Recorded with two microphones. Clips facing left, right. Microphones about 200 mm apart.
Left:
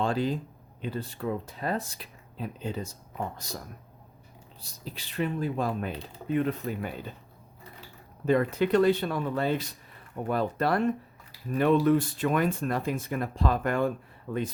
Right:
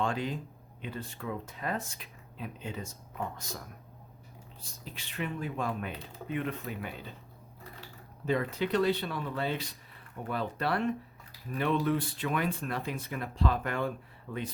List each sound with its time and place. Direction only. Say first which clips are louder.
0.0 s speech: left 5 dB; 35° left (ahead or behind)
4.6 s speech: left 6 dB; 35° left (ahead or behind)
8.2 s speech: left 6 dB; 50° left (ahead or behind)